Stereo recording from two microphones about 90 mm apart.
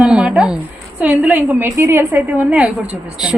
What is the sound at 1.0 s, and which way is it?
Speech, 20° right (ahead or behind).